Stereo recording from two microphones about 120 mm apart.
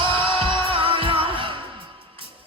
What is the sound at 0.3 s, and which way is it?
Music, 45° right (ahead or behind).